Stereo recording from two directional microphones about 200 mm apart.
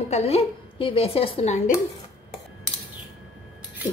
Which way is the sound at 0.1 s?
30° left (ahead or behind).